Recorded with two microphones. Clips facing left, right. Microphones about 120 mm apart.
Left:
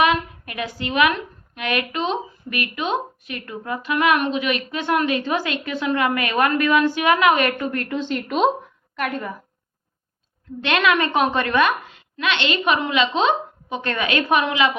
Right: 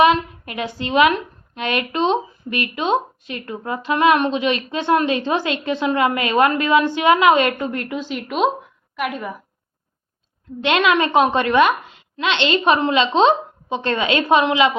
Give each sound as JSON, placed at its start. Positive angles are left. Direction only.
{"t": 0.0, "sound": "a woman's voice", "side_deg": -25}
{"t": 7.9, "sound": "a woman's voice", "side_deg": -5}
{"t": 10.6, "sound": "speech", "side_deg": -20}